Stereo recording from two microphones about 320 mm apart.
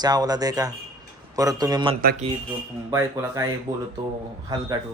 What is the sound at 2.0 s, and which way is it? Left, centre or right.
Speech, right.